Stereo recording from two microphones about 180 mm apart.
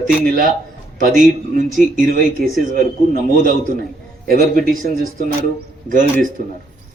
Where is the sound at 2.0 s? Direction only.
55° right (ahead or behind).